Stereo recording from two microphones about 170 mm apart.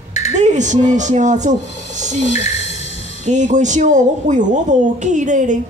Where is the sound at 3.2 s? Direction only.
45° right (ahead or behind).